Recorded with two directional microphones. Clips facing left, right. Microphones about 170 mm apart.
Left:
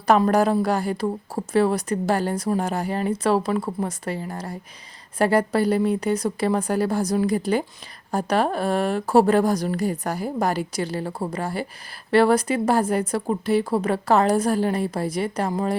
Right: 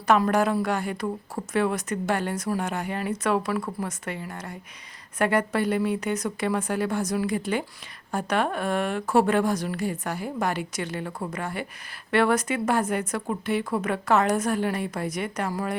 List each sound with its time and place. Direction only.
0.1 s speech: 35° left (ahead or behind)